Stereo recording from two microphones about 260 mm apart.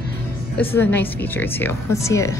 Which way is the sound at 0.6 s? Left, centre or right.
Centre.